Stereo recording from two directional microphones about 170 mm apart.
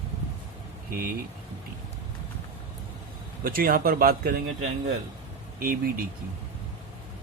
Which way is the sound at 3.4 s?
55° right (ahead or behind).